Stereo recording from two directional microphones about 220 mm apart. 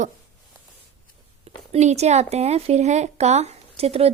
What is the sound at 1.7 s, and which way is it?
Speech, 30° right (ahead or behind).